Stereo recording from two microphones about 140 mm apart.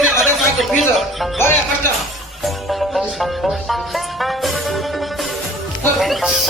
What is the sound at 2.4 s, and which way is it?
Music, centre (ahead or behind).